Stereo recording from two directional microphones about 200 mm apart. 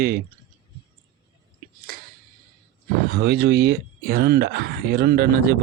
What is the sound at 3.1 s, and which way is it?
Speech, 50° right (ahead or behind).